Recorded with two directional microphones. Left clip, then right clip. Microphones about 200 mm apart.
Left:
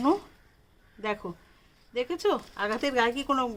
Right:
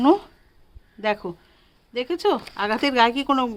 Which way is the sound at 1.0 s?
40° right (ahead or behind).